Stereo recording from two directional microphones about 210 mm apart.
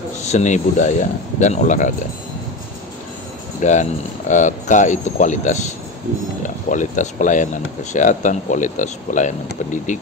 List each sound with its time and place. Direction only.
0.3 s speech: 35° left (ahead or behind)
3.6 s speech: 35° left (ahead or behind)